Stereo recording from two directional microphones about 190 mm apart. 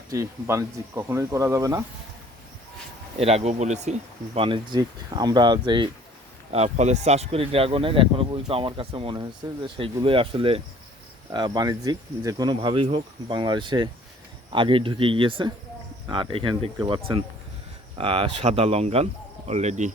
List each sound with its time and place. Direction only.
0.1 s speech: 15° right (ahead or behind)
3.2 s speech: 30° right (ahead or behind)
4.4 s speech: 25° right (ahead or behind)
6.5 s speech: 35° right (ahead or behind)